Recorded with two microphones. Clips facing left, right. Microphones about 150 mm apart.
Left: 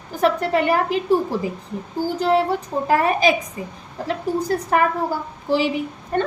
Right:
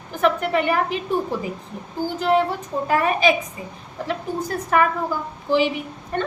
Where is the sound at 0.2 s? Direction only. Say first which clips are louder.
Left 1 dB; 35° left (ahead or behind).